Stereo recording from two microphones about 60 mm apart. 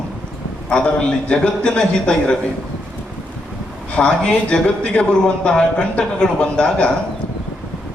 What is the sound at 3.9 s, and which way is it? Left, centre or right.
A man's voice, centre.